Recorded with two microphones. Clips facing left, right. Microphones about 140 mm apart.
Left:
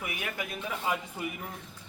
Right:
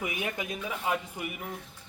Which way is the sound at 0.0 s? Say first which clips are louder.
Right 3 dB; 20° right (ahead or behind).